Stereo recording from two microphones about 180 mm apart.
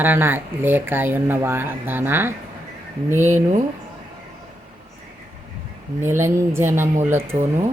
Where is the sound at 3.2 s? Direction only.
40° right (ahead or behind).